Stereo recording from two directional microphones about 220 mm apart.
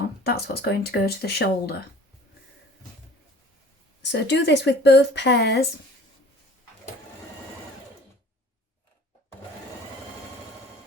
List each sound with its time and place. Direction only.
0.3 s a woman's voice: 45° left (ahead or behind)
4.1 s a woman's voice: 50° left (ahead or behind)